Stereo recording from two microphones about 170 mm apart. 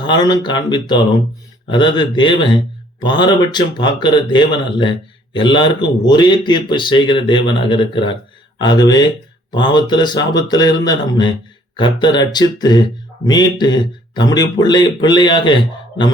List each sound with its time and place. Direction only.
0.0 s a man's voice: 25° left (ahead or behind)